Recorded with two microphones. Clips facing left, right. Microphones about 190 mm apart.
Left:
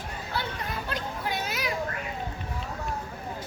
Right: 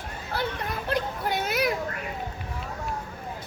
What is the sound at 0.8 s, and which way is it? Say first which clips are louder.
Children playing: right 7 dB; 55° right (ahead or behind).